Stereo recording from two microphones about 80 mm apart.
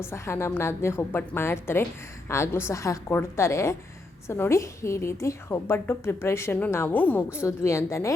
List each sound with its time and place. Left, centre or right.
0.0 s a woman's voice: left
6.9 s a woman's voice: left
7.3 s a woman's voice: left